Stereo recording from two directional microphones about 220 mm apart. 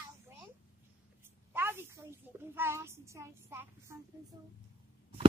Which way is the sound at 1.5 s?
10° right (ahead or behind).